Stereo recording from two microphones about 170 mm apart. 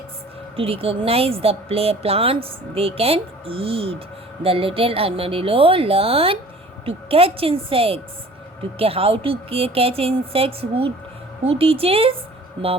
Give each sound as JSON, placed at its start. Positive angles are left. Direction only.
{"t": 0.5, "sound": "speech", "side_deg": -35}